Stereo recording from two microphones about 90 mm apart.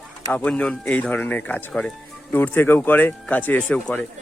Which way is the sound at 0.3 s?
15° left (ahead or behind).